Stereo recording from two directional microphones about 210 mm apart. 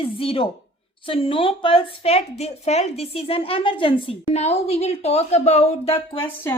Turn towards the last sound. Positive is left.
turn(degrees=10)  # may be behind; listen again after turning